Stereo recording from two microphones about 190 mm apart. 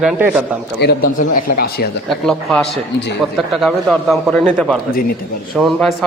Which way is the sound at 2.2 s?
Centre (ahead or behind).